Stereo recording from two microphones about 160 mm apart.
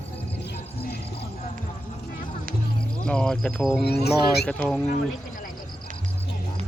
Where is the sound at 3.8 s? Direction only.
90° left.